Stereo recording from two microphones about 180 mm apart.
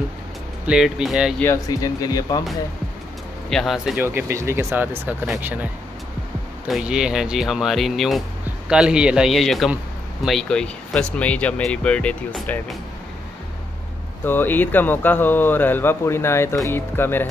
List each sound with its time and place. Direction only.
0.7 s speech: 5° right (ahead or behind)
1.4 s speech: 15° left (ahead or behind)
3.4 s speech: centre (ahead or behind)
6.7 s speech: 5° right (ahead or behind)
14.2 s speech: 10° left (ahead or behind)